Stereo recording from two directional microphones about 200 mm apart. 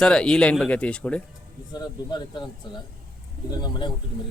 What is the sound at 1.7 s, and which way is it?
Speech, 20° left (ahead or behind).